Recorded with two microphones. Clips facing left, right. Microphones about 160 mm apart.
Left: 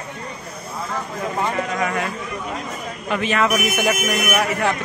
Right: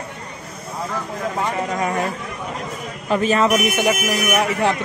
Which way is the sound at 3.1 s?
35° right (ahead or behind).